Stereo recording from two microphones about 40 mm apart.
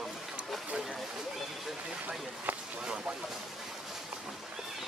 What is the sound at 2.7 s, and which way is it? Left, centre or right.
Speech, right.